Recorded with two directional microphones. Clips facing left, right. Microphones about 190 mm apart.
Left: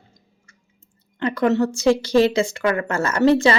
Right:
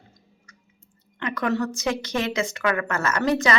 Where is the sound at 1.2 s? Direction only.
30° left (ahead or behind).